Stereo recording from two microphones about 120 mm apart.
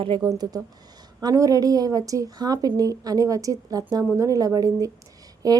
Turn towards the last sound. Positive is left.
turn(degrees=-30)  # may be behind; listen again after turning